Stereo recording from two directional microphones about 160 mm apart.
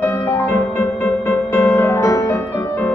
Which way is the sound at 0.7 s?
10° left (ahead or behind).